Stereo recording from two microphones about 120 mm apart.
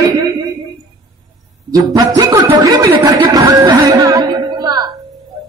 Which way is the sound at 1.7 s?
30° right (ahead or behind).